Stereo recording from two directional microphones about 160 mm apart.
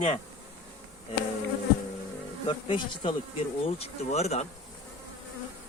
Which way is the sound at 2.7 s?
35° left (ahead or behind).